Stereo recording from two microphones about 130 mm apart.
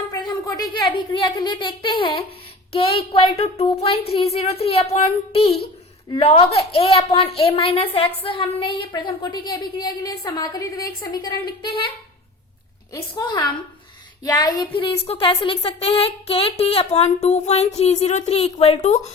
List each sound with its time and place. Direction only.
0.1 s speech: 30° left (ahead or behind)
2.7 s a sound: 45° left (ahead or behind)
8.9 s a woman's voice: 35° left (ahead or behind)
13.2 s a woman's voice: 30° left (ahead or behind)
14.3 s child singing: 30° left (ahead or behind)
14.7 s a sound: 45° left (ahead or behind)
18.0 s a woman's voice: 60° left (ahead or behind)